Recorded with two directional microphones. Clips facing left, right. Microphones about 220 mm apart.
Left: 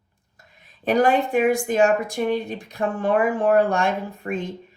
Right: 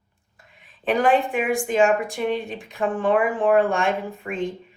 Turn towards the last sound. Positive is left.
turn(degrees=40)  # may be behind; listen again after turning